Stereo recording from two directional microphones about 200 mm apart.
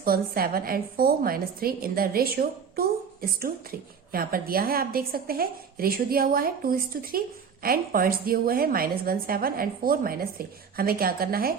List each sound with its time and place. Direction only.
0.0 s a woman's voice: 45° right (ahead or behind)